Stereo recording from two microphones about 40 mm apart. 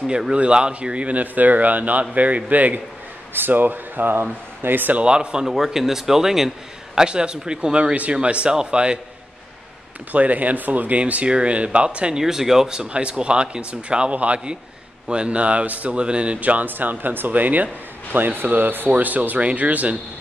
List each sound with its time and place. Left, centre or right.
0.0 s speech: centre; by 2.8 s right
3.3 s speech: right
5.0 s speech: right
5.5 s speech: centre
7.0 s speech: right
10.1 s speech: right
11.2 s speech: right
12.2 s speech: centre; by 16.0 s right
16.0 s speech: right
16.3 s speech: right
18.9 s speech: right